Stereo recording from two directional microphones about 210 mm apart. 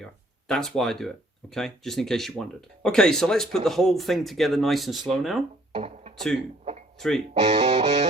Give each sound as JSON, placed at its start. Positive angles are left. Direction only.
{"t": 0.0, "sound": "speech", "side_deg": 5}
{"t": 5.7, "sound": "music", "side_deg": -30}
{"t": 6.1, "sound": "speech", "side_deg": 0}
{"t": 7.3, "sound": "speech", "side_deg": -30}